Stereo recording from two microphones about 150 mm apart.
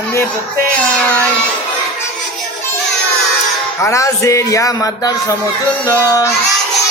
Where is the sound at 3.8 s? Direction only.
20° left (ahead or behind).